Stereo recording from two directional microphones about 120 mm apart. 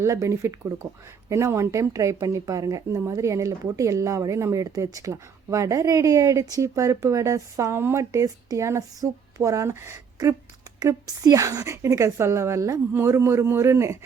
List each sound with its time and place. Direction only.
0.0 s speech: 25° right (ahead or behind)